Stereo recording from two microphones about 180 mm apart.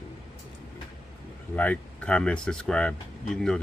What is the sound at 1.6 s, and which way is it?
Speech, 5° left (ahead or behind).